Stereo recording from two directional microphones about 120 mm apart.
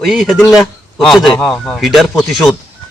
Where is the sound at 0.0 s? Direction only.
Centre (ahead or behind).